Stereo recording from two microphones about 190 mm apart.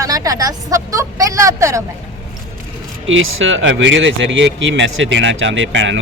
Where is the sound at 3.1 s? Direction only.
90° right.